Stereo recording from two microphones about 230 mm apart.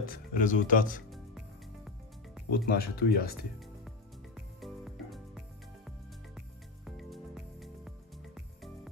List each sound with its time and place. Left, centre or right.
0.1 s speech: left
2.5 s speech: left
4.6 s music: centre